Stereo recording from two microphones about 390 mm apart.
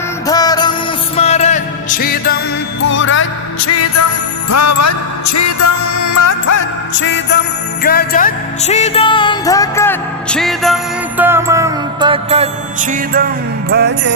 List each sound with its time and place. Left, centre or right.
0.3 s music: centre; by 6.7 s left
6.9 s music: left; by 14.1 s right